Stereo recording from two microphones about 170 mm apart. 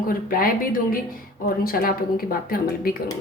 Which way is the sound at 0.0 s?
55° left (ahead or behind).